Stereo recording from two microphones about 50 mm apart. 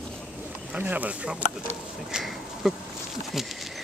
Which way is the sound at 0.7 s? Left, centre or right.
Right.